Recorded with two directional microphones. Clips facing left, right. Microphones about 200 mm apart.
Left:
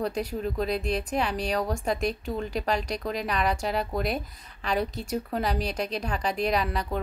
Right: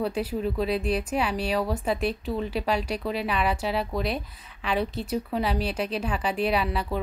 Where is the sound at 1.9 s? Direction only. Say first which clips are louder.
Even; 40° left (ahead or behind).